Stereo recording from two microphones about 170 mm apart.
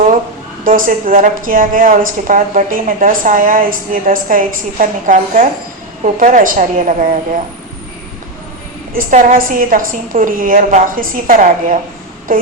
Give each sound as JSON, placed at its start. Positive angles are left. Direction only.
{"t": 0.6, "sound": "a woman's voice", "side_deg": -55}
{"t": 8.9, "sound": "a woman's voice", "side_deg": -55}
{"t": 12.3, "sound": "a sound", "side_deg": -55}